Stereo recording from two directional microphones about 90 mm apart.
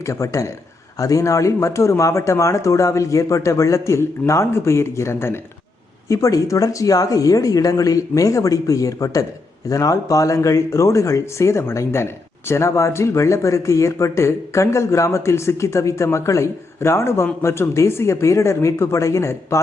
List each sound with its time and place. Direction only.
0.0 s speech: 35° left (ahead or behind)